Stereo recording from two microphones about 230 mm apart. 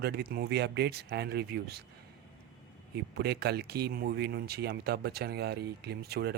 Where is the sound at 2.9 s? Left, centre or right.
Right.